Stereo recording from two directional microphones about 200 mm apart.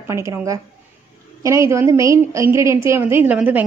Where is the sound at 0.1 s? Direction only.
15° right (ahead or behind).